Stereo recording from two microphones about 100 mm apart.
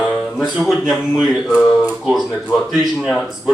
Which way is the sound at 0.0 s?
5° right (ahead or behind).